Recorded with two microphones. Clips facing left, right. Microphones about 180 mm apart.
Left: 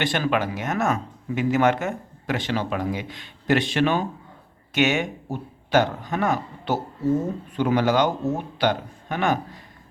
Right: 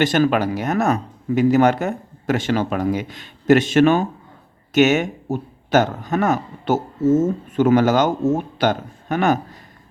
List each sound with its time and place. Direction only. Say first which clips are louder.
0.0 s speech: right 6 dB; 40° right (ahead or behind)